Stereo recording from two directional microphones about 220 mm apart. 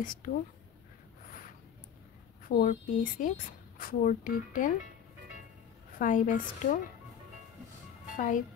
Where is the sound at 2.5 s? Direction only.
40° left (ahead or behind).